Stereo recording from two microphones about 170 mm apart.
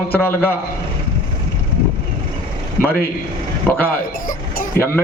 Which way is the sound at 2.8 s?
10° left (ahead or behind).